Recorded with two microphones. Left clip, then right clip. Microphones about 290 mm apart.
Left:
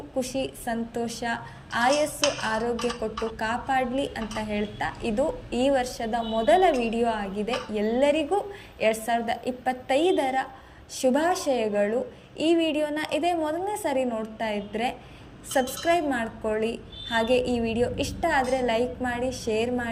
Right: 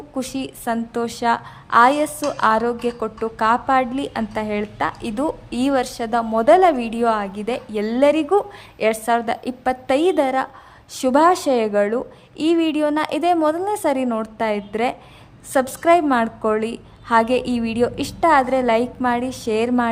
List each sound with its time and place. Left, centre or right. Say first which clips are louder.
0.2 s a woman's voice: right 1 dB; centre